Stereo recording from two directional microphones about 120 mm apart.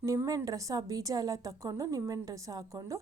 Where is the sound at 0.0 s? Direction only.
25° right (ahead or behind).